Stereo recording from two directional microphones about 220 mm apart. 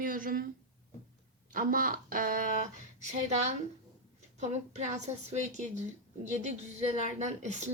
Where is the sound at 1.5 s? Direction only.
40° right (ahead or behind).